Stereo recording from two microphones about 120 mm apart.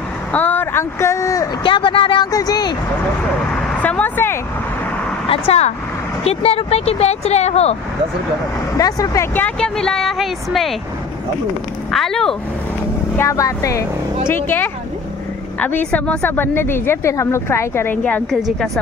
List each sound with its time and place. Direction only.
0.3 s speech: 15° left (ahead or behind)
1.6 s speech: 45° left (ahead or behind)
2.3 s vehicle: 30° left (ahead or behind)
3.8 s speech: 15° left (ahead or behind)
6.2 s speech: 55° left (ahead or behind)
8.7 s speech: 30° left (ahead or behind)
9.6 s speech: 5° left (ahead or behind)
11.9 s speech: 5° left (ahead or behind)
13.2 s speech: 25° left (ahead or behind)
15.9 s speech: 15° left (ahead or behind)